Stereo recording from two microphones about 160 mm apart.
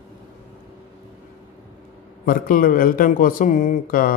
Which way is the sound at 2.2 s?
60° left (ahead or behind).